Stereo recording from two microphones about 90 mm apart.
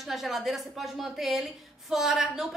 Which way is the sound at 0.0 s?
Centre (ahead or behind).